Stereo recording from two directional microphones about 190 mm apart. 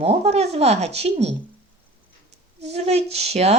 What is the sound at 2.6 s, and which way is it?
Speech, 35° right (ahead or behind).